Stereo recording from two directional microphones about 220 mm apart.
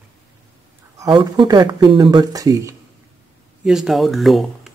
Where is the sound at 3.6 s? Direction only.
Centre (ahead or behind).